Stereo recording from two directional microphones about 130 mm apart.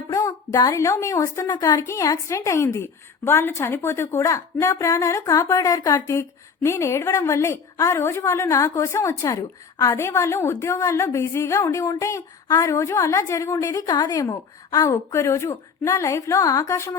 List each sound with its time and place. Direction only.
0.1 s a woman's voice: 25° left (ahead or behind)
1.5 s a woman's voice: 35° left (ahead or behind)